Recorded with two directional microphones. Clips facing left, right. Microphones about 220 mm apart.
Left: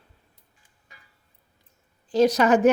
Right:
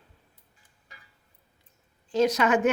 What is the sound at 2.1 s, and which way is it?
Speech, 35° left (ahead or behind).